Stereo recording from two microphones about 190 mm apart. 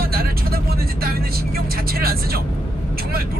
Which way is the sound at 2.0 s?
55° right (ahead or behind).